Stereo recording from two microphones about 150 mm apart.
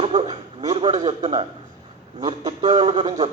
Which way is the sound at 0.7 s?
45° right (ahead or behind).